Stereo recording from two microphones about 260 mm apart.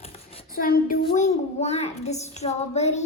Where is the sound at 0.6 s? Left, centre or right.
Left.